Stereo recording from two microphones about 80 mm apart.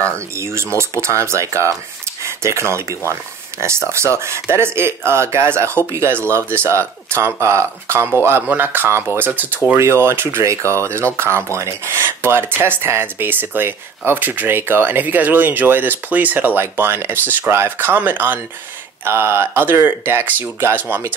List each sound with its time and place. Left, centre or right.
0.4 s speech: right
9.8 s speech: right